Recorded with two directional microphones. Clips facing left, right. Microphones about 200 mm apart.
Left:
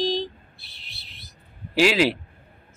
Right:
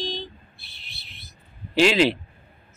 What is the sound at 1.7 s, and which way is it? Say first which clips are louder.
Speech: right 1 dB; 5° left (ahead or behind).